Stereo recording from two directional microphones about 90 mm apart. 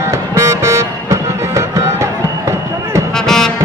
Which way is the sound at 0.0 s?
30° right (ahead or behind).